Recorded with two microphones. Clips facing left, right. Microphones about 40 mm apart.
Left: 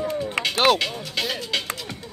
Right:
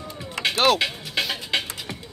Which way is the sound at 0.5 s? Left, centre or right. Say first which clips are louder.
Left 1 dB; centre.